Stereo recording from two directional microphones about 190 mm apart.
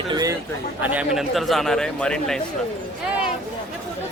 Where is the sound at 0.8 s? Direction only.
10° right (ahead or behind).